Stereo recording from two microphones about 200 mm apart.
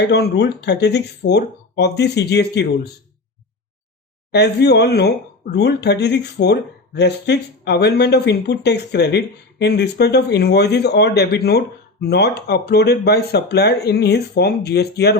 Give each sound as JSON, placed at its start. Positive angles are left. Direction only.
{"t": 0.0, "sound": "speech", "side_deg": 55}
{"t": 4.3, "sound": "speech", "side_deg": 55}